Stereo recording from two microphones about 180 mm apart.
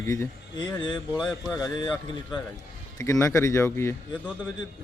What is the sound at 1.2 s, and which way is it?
Speech, centre (ahead or behind).